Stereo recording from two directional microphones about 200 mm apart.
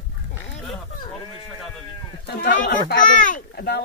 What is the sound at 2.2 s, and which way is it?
Speech, 55° left (ahead or behind).